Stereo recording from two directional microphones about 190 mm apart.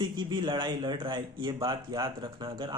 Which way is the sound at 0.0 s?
25° right (ahead or behind).